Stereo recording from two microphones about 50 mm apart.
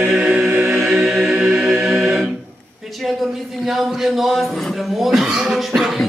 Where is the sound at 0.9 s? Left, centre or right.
Centre.